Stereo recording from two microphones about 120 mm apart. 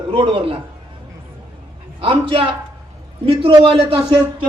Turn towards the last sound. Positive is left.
turn(degrees=-50)  # may be behind; listen again after turning